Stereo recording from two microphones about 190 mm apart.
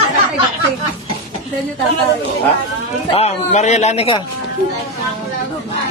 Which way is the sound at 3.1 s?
35° left (ahead or behind).